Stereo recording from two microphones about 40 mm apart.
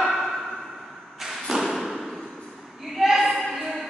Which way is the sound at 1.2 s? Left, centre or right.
Centre.